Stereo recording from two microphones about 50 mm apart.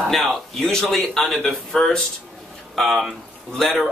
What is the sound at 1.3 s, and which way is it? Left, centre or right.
Speech, left.